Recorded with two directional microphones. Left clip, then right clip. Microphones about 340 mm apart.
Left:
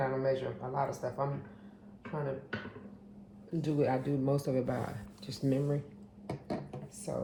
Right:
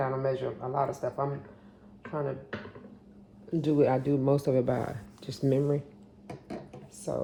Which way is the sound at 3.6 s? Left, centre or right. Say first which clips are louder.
Right 6 dB; right.